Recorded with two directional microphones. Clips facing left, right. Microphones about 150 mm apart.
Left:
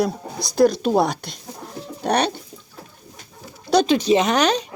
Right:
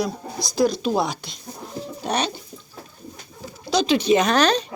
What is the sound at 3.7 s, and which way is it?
Pigeon, 60° left (ahead or behind).